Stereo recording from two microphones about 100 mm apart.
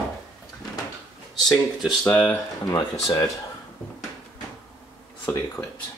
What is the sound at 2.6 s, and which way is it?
Speech, 40° left (ahead or behind).